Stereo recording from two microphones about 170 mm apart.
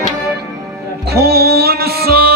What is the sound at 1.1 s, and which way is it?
Music, 65° right (ahead or behind).